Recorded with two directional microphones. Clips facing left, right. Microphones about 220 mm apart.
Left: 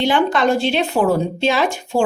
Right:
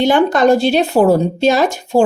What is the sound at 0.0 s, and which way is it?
Speech, 45° right (ahead or behind).